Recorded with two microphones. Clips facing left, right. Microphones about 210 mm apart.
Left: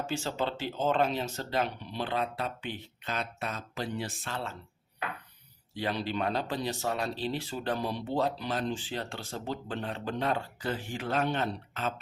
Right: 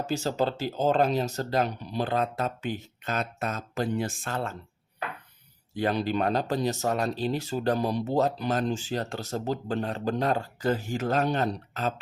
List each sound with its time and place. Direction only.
0.0 s speech: 40° right (ahead or behind)
5.7 s speech: 50° right (ahead or behind)